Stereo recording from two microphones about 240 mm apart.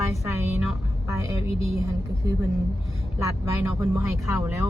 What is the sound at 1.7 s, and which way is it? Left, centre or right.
Speech, centre.